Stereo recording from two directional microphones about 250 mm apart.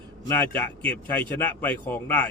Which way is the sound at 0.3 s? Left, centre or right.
Centre.